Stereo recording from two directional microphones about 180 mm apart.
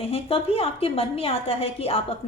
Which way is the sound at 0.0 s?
35° left (ahead or behind).